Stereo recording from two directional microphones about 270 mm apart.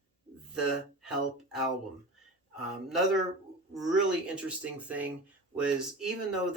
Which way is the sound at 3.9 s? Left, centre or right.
Centre.